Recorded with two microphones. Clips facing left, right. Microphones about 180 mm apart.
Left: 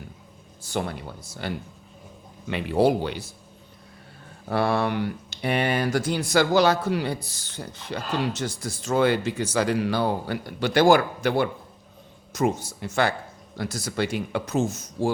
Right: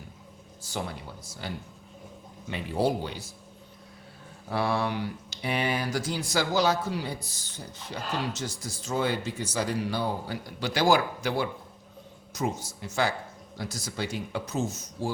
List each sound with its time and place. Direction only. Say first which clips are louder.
0.6 s speech: left 6 dB; 60° left (ahead or behind)
4.4 s speech: left 4 dB; 60° left (ahead or behind)
12.8 s speech: left 4 dB; 65° left (ahead or behind); by 15.1 s 90° left